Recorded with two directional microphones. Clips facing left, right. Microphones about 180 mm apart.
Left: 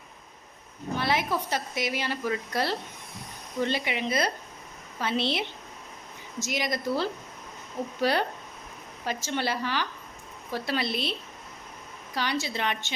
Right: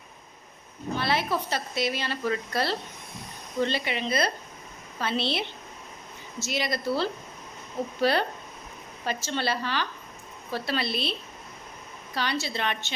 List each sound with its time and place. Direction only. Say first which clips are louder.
0.9 s a woman's voice: even; 15° left (ahead or behind)
12.1 s a woman's voice: even; 15° left (ahead or behind)